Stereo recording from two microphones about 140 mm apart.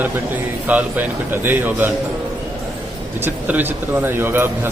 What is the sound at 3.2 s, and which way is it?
A man's voice, 15° right (ahead or behind).